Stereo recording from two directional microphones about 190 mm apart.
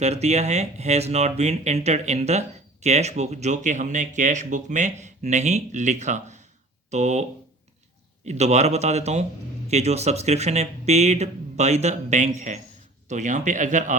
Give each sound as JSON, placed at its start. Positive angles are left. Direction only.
{"t": 0.0, "sound": "speech", "side_deg": -35}